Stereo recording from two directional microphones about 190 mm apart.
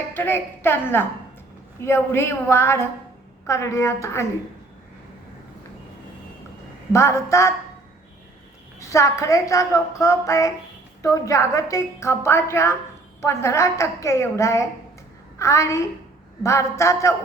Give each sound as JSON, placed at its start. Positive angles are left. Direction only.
{"t": 0.1, "sound": "a woman's voice", "side_deg": 10}
{"t": 6.9, "sound": "a woman's voice", "side_deg": 15}
{"t": 8.8, "sound": "a woman's voice", "side_deg": 15}